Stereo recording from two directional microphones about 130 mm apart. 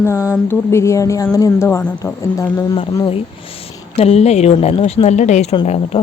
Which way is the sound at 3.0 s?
45° left (ahead or behind).